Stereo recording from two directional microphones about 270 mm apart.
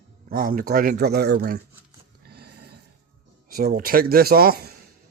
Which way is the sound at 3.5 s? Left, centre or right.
Right.